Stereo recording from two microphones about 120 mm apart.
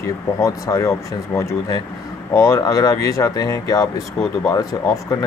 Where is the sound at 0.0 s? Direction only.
25° left (ahead or behind).